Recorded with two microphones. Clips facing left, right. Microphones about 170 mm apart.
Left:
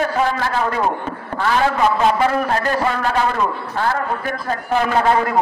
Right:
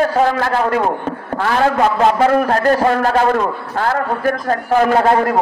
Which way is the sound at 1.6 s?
45° right (ahead or behind).